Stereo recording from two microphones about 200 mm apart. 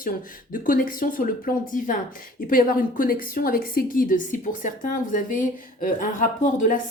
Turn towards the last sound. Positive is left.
turn(degrees=40)  # may be behind; listen again after turning